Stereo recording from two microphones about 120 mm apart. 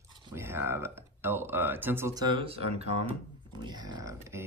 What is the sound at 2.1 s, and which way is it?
Speech, 40° right (ahead or behind).